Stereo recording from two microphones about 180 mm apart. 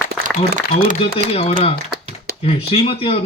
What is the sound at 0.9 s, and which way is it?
Speech, 30° left (ahead or behind).